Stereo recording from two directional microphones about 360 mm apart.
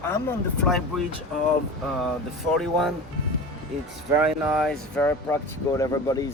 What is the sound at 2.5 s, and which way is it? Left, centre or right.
Speech, centre.